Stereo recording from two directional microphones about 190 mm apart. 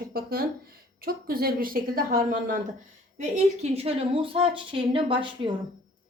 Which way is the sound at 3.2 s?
35° right (ahead or behind).